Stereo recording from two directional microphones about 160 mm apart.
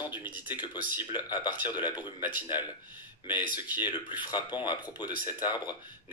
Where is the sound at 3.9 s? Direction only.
30° left (ahead or behind).